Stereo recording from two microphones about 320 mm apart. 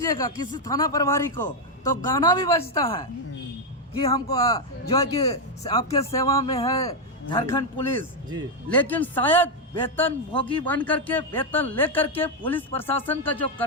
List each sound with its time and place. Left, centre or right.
0.0 s a man's voice: centre